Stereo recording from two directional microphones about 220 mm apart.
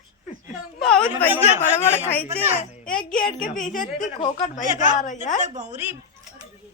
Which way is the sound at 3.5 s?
35° left (ahead or behind).